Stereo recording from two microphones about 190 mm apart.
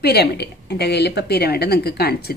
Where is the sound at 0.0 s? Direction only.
60° left (ahead or behind).